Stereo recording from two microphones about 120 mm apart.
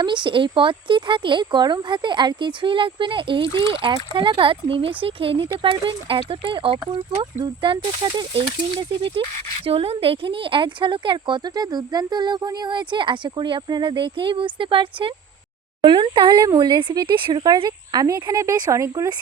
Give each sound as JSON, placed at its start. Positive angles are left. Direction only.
{"t": 0.0, "sound": "speech", "side_deg": -40}
{"t": 9.6, "sound": "speech", "side_deg": -55}